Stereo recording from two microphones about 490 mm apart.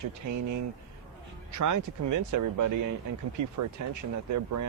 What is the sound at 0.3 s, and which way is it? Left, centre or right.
Speech, right.